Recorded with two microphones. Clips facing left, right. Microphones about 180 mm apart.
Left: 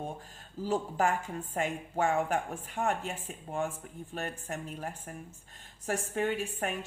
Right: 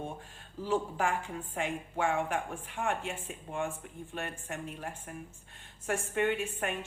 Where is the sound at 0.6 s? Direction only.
40° left (ahead or behind).